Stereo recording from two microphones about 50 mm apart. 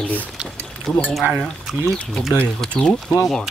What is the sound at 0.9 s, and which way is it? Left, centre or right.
Speech, centre.